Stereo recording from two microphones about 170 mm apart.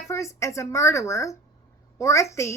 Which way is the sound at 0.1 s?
15° left (ahead or behind).